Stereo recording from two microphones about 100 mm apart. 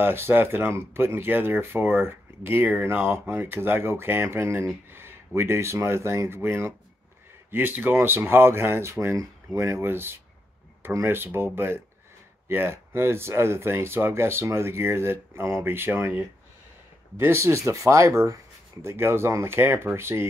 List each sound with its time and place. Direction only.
0.0 s speech: 25° right (ahead or behind)
17.2 s speech: 25° right (ahead or behind)